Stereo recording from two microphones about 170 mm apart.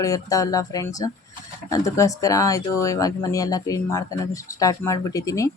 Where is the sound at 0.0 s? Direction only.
20° left (ahead or behind).